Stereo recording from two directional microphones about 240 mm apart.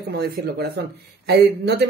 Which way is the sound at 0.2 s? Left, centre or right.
Right.